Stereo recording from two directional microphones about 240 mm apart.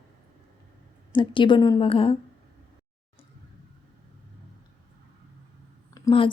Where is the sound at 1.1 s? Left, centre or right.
Centre.